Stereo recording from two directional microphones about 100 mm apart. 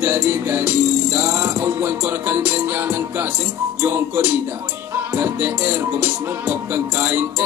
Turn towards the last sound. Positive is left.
turn(degrees=-20)  # may be behind; listen again after turning